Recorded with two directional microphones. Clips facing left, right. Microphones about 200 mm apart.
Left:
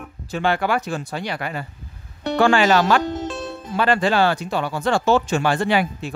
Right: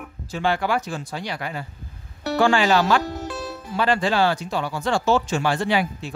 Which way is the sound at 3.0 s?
25° left (ahead or behind).